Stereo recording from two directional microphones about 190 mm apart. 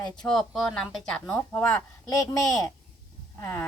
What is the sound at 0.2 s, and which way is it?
Speech, centre (ahead or behind).